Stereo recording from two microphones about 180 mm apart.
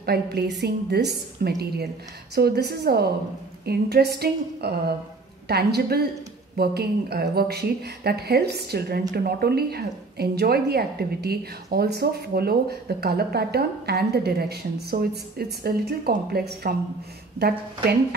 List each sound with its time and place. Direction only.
0.0 s a woman's voice: 60° right (ahead or behind)